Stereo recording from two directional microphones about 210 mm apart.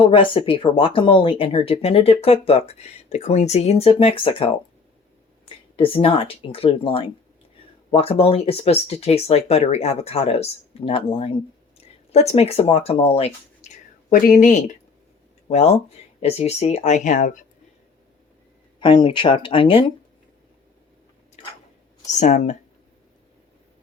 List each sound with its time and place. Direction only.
0.1 s speech: 25° left (ahead or behind)
5.7 s speech: 25° left (ahead or behind)
14.1 s speech: 40° left (ahead or behind)
18.8 s speech: 20° left (ahead or behind)
22.0 s speech: 35° left (ahead or behind)